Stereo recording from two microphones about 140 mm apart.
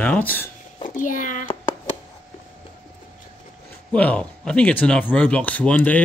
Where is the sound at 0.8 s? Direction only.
70° left (ahead or behind).